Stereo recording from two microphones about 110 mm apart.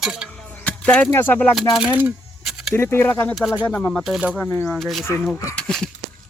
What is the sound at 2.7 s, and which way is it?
Speech, 20° left (ahead or behind).